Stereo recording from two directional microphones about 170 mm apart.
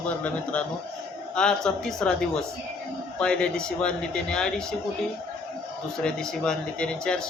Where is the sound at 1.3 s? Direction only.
5° left (ahead or behind).